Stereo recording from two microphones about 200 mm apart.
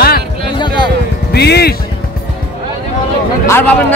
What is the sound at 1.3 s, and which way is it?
Speech, 55° left (ahead or behind).